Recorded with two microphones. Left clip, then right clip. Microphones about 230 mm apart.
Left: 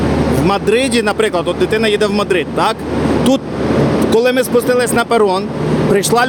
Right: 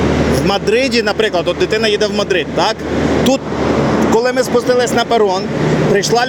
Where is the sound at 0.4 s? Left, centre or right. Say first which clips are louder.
Left 2 dB; centre.